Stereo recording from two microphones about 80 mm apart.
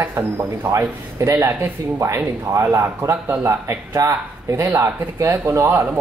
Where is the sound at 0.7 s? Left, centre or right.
Right.